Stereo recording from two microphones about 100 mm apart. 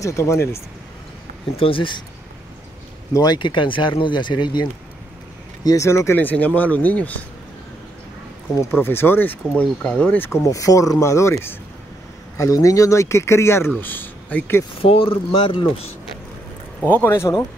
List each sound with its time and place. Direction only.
0.0 s speech: 30° left (ahead or behind)
1.6 s speech: 60° left (ahead or behind)
3.1 s speech: 40° left (ahead or behind)
5.6 s speech: 35° left (ahead or behind)
6.1 s speech: 15° left (ahead or behind)
8.7 s speech: 20° left (ahead or behind)
10.4 s speech: 35° left (ahead or behind)
14.8 s speech: 65° left (ahead or behind)
16.9 s speech: 20° left (ahead or behind)